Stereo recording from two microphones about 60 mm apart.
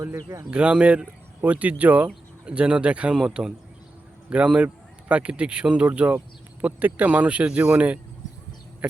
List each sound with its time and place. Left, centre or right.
0.5 s a man's voice: centre